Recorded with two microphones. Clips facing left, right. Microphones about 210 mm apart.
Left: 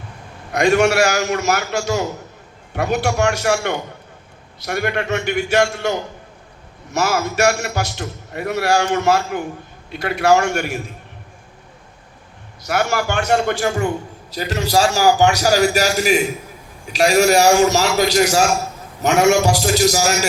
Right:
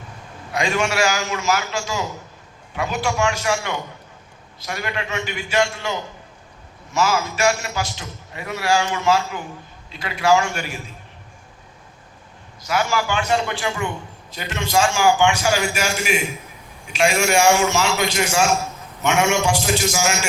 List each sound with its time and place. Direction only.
0.5 s a man's voice: 65° left (ahead or behind)
6.9 s a man's voice: 65° left (ahead or behind)
12.6 s a man's voice: 65° left (ahead or behind); by 20.1 s 40° left (ahead or behind)